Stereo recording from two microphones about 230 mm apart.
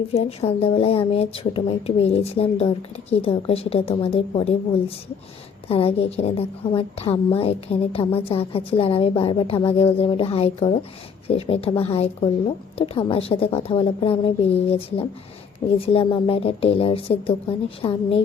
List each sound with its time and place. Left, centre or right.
0.1 s a woman's voice: left
5.6 s a woman's voice: left